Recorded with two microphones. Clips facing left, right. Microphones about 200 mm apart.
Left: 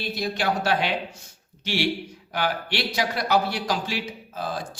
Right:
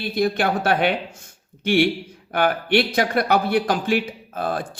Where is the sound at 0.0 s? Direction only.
55° right (ahead or behind).